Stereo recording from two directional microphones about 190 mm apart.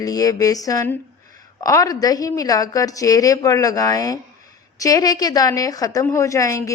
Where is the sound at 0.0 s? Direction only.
20° left (ahead or behind).